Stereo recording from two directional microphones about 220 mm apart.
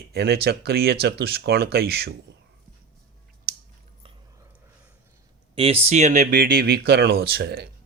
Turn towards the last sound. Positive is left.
turn(degrees=-50)  # may be behind; listen again after turning